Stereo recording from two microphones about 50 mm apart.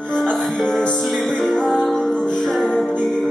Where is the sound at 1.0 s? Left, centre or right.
Centre.